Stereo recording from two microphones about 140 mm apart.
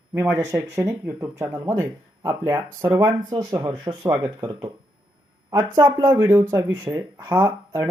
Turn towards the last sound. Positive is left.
turn(degrees=-30)  # may be behind; listen again after turning